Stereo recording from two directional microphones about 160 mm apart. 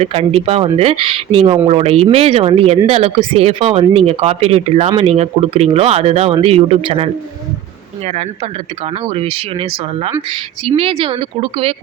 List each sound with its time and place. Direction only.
0.0 s speech: 40° right (ahead or behind)